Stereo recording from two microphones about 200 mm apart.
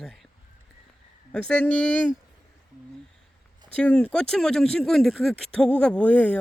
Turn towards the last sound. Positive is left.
turn(degrees=5)  # may be behind; listen again after turning